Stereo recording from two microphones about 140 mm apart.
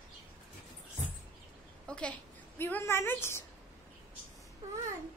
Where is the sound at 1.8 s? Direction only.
5° left (ahead or behind).